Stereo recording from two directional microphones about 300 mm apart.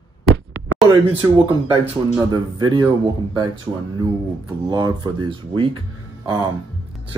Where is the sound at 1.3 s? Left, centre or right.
Centre.